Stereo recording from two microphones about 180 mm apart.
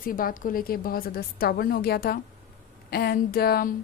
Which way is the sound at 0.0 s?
50° left (ahead or behind).